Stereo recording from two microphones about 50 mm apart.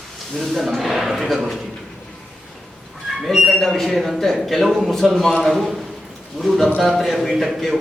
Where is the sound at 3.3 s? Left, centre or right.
Centre.